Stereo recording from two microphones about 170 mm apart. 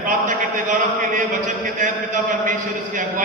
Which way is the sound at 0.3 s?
50° right (ahead or behind).